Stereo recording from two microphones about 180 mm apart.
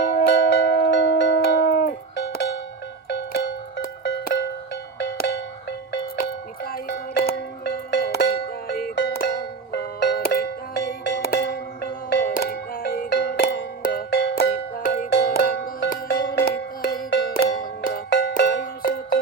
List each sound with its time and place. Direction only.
0.2 s music: 70° left (ahead or behind)
6.1 s music: 55° left (ahead or behind); by 13.7 s 75° left (ahead or behind)
13.8 s music: 60° left (ahead or behind)